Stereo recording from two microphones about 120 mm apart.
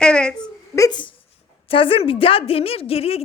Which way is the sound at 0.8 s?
30° left (ahead or behind).